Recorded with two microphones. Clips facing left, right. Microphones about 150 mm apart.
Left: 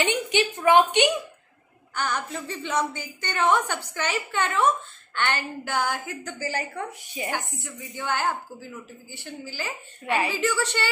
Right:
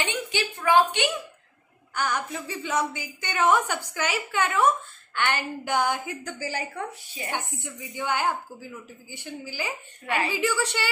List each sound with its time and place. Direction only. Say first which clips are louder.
0.0 s speech: left 5 dB; 20° left (ahead or behind)
2.0 s a woman's voice: even; 10° right (ahead or behind)
6.9 s speech: left 4 dB; 15° left (ahead or behind)
7.2 s a woman's voice: even; 20° right (ahead or behind)
10.0 s speech: left 2 dB; 15° left (ahead or behind)
10.6 s a woman's voice: left 1 dB; 10° right (ahead or behind)